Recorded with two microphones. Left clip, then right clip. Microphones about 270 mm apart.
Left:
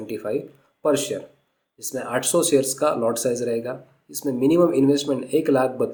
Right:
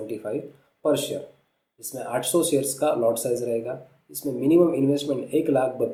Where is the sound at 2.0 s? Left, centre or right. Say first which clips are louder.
Left 2 dB; left.